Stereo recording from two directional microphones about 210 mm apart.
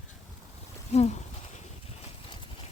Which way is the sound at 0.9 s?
30° left (ahead or behind).